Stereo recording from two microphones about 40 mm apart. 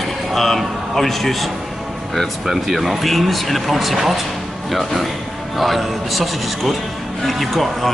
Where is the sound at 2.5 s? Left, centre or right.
Centre.